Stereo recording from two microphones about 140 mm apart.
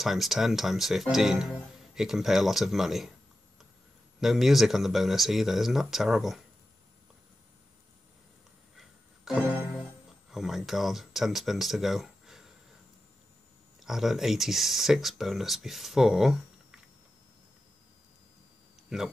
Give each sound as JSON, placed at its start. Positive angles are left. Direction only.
{"t": 0.0, "sound": "speech", "side_deg": 0}
{"t": 4.2, "sound": "speech", "side_deg": 0}
{"t": 8.7, "sound": "music", "side_deg": -5}
{"t": 10.3, "sound": "speech", "side_deg": 0}
{"t": 13.7, "sound": "speech", "side_deg": 0}
{"t": 18.9, "sound": "speech", "side_deg": -5}